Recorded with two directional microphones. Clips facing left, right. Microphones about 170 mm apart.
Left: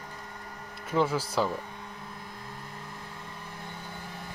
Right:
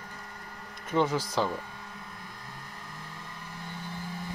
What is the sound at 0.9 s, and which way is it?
Speech, 5° left (ahead or behind).